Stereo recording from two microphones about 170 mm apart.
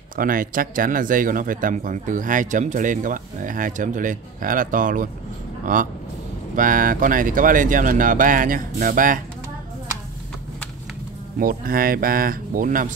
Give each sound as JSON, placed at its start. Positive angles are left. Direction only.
{"t": 0.1, "sound": "speech", "side_deg": -55}
{"t": 11.3, "sound": "speech", "side_deg": -60}